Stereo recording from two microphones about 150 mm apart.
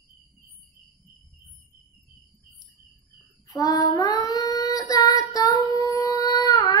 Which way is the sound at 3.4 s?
25° left (ahead or behind).